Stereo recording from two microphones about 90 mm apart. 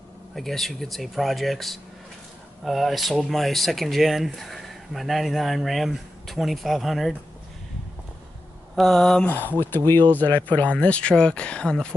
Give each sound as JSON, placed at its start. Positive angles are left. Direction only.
{"t": 0.4, "sound": "speech", "side_deg": 0}
{"t": 8.7, "sound": "speech", "side_deg": 0}
{"t": 9.2, "sound": "speech", "side_deg": 20}